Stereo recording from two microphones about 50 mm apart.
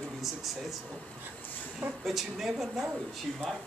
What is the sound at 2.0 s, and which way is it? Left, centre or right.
Speech, centre.